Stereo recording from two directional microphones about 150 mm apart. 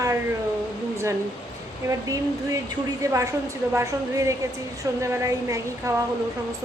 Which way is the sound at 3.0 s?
20° right (ahead or behind).